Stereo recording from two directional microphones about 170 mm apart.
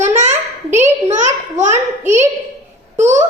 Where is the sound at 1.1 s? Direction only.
45° right (ahead or behind).